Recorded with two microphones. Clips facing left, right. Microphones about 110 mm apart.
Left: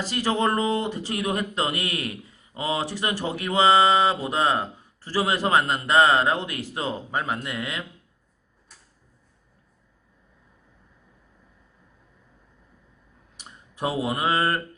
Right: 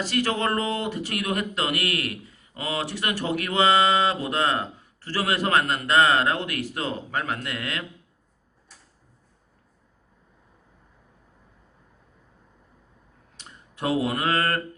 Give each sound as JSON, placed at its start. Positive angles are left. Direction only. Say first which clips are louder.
{"t": 0.1, "sound": "speech", "louder": "left 2 dB", "side_deg": 20}
{"t": 13.4, "sound": "speech", "louder": "left 1 dB", "side_deg": 15}